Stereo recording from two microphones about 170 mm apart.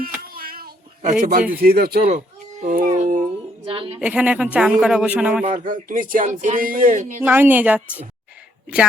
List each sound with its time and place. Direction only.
0.0 s a sound: 60° right (ahead or behind)
1.2 s speech: 55° right (ahead or behind)
2.0 s a child's voice: 45° right (ahead or behind)
3.7 s a woman's voice: 30° right (ahead or behind)
4.0 s a man's voice: 5° right (ahead or behind)
5.5 s speech: 50° right (ahead or behind)
7.2 s a man's voice: 10° right (ahead or behind)